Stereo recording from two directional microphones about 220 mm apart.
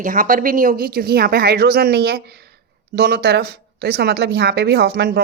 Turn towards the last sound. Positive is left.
turn(degrees=-45)  # may be behind; listen again after turning